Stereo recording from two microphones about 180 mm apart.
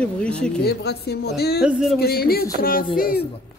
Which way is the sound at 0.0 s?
5° left (ahead or behind).